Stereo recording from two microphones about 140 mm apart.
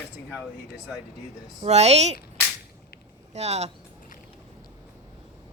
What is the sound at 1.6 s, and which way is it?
Speech, 50° right (ahead or behind).